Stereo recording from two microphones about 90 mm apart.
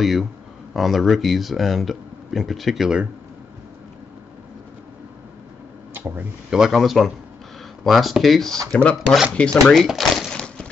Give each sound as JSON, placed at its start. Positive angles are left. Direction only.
{"t": 0.0, "sound": "speech", "side_deg": 0}
{"t": 5.9, "sound": "a sound", "side_deg": -25}
{"t": 6.5, "sound": "speech", "side_deg": -5}
{"t": 9.3, "sound": "speech", "side_deg": 10}